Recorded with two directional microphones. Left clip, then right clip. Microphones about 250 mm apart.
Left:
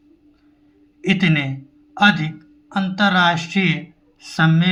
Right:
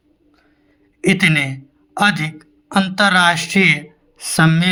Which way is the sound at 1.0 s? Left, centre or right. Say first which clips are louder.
Right 5 dB; right.